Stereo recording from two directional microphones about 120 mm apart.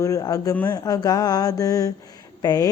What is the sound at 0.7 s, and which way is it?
Speech, 30° left (ahead or behind).